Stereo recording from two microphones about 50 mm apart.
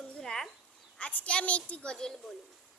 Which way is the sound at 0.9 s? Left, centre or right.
Left.